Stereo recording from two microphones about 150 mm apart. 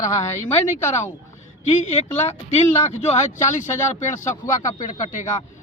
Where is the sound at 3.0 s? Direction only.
55° left (ahead or behind).